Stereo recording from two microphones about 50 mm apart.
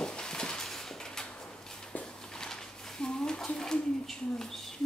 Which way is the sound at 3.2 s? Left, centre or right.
Centre.